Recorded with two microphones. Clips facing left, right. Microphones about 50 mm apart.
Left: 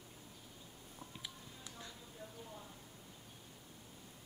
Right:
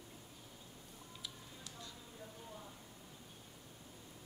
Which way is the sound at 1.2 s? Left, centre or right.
Left.